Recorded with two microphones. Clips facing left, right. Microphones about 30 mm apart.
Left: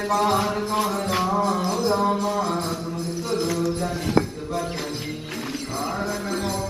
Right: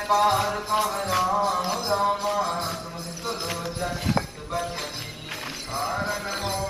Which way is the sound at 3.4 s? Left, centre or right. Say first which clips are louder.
Left 7 dB; right.